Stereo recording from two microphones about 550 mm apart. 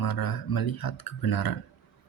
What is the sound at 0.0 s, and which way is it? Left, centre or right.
Speech, left.